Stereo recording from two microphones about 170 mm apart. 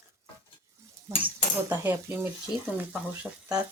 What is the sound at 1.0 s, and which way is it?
Speech, 15° right (ahead or behind).